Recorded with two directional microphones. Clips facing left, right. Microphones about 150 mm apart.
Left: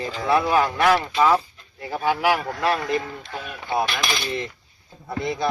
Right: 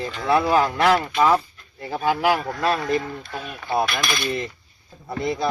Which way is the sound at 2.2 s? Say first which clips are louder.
Right 1 dB; 10° left (ahead or behind).